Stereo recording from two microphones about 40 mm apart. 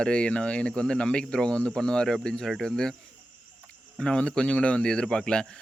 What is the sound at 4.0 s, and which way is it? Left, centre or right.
Speech, left.